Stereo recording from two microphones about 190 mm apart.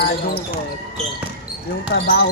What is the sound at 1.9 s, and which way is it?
Speech, 70° left (ahead or behind).